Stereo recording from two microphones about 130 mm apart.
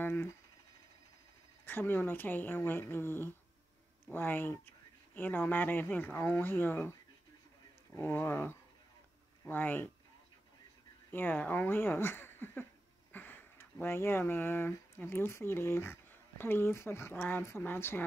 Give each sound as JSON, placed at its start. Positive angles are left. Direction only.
{"t": 0.0, "sound": "a sound", "side_deg": 15}
{"t": 1.7, "sound": "speech", "side_deg": 15}
{"t": 11.1, "sound": "speech", "side_deg": 15}